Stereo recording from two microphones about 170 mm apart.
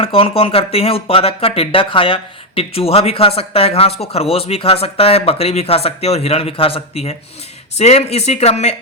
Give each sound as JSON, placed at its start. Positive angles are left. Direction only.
{"t": 0.0, "sound": "speech", "side_deg": 35}